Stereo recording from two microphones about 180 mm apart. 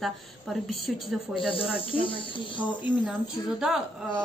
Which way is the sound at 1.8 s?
30° left (ahead or behind).